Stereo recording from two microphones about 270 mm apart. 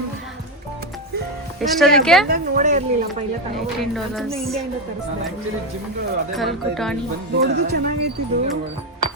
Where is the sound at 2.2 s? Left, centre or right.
Right.